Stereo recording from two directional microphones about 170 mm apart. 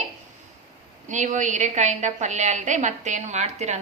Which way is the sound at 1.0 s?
45° right (ahead or behind).